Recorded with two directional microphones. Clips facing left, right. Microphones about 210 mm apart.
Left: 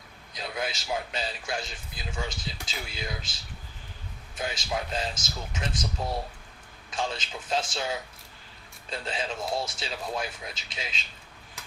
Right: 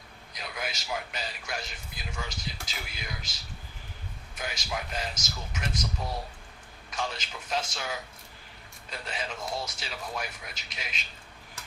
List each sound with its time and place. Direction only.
0.3 s a man's voice: 25° left (ahead or behind)
4.4 s a man's voice: 25° left (ahead or behind)
6.9 s a man's voice: 25° left (ahead or behind)